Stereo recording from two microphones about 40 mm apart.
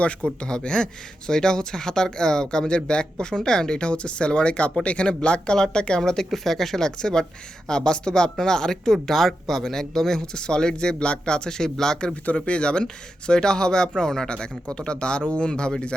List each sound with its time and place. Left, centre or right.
0.0 s speech: left
6.3 s speech: centre
6.8 s speech: centre
10.2 s speech: centre
12.2 s speech: left